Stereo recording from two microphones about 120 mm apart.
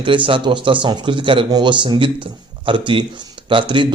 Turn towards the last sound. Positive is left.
turn(degrees=-40)  # may be behind; listen again after turning